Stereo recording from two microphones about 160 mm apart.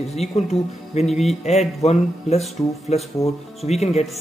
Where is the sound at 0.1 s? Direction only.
45° left (ahead or behind).